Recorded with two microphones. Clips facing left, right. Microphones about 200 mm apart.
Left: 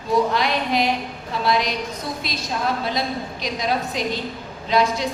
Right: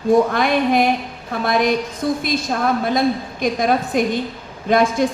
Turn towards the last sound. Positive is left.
turn(degrees=-50)  # may be behind; listen again after turning